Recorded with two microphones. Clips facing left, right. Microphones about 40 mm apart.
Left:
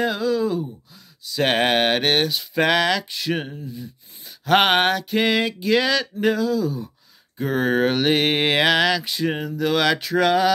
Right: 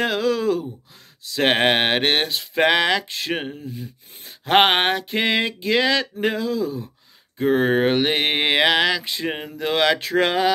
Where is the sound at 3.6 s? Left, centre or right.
Right.